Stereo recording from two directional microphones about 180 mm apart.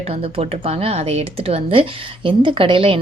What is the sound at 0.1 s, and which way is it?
Speech, 30° right (ahead or behind).